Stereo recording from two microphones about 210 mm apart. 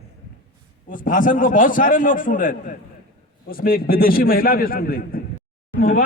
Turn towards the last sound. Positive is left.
turn(degrees=45)  # may be behind; listen again after turning